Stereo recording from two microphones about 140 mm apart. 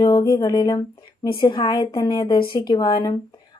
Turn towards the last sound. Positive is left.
turn(degrees=35)  # may be behind; listen again after turning